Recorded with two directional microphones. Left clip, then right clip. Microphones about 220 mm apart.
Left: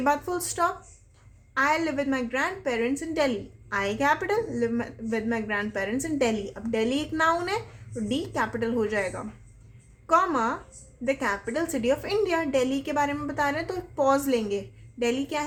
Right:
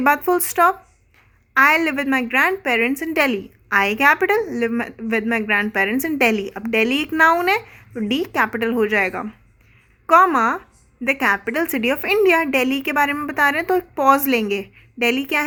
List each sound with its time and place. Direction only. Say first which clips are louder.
0.0 s a woman's voice: right 9 dB; 35° right (ahead or behind)